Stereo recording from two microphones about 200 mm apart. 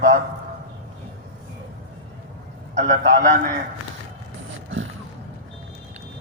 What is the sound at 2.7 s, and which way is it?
Speech, 35° right (ahead or behind).